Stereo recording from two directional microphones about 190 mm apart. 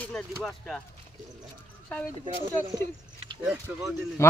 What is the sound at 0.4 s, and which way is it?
Speech, centre (ahead or behind).